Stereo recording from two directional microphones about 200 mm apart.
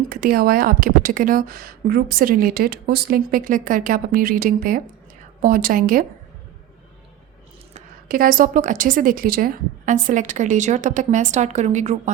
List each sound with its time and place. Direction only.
0.1 s a woman's voice: 45° right (ahead or behind)
7.7 s a woman's voice: 45° right (ahead or behind)